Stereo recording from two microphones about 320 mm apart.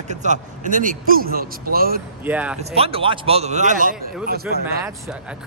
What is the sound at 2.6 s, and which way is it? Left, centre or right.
A man's voice, centre.